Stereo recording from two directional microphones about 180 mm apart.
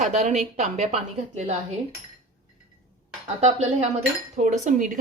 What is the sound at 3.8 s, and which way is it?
A woman's voice, 40° right (ahead or behind).